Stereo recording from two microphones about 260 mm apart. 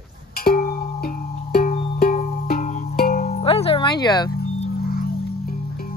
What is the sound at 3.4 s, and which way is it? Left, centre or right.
Music, left.